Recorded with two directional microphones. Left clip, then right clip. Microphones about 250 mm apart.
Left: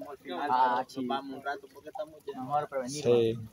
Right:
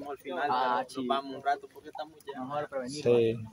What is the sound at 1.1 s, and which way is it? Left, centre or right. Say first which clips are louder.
A man's voice: right 4 dB; centre.